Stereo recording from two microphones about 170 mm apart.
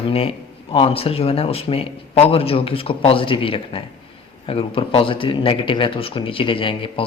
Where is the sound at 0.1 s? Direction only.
35° left (ahead or behind).